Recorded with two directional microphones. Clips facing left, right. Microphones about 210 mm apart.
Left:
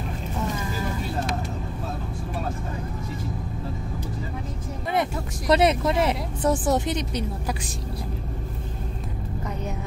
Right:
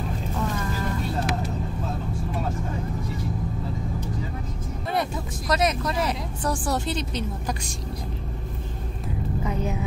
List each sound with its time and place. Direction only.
5.5 s speech: 30° left (ahead or behind)
9.4 s vehicle: 5° right (ahead or behind)